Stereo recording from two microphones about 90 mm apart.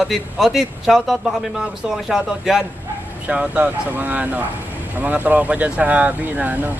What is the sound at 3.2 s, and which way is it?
Speech, 15° right (ahead or behind).